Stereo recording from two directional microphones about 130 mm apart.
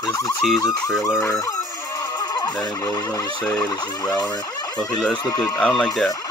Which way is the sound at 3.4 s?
25° left (ahead or behind).